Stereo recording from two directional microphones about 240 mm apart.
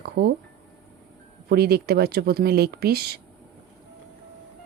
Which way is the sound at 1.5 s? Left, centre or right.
Right.